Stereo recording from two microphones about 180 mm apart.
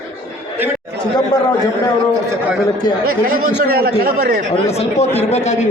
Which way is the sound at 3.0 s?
50° right (ahead or behind).